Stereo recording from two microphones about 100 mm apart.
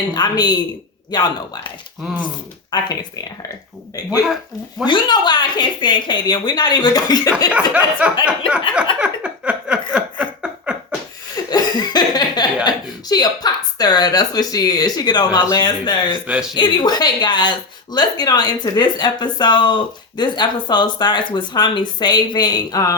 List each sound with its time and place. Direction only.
0.1 s speech: 40° left (ahead or behind)
2.7 s speech: 45° left (ahead or behind)
4.9 s speech: 50° left (ahead or behind)
7.5 s a sound: 10° right (ahead or behind)
11.5 s cough: 45° left (ahead or behind)
12.6 s a woman's voice: 45° left (ahead or behind)
16.2 s a sound: 10° right (ahead or behind)
16.6 s speech: 45° left (ahead or behind)